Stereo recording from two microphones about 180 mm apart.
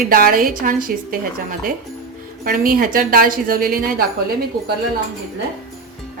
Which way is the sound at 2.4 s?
55° right (ahead or behind).